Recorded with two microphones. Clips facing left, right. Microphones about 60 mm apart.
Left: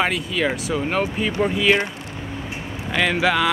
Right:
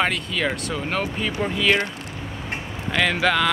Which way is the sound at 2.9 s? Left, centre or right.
Centre.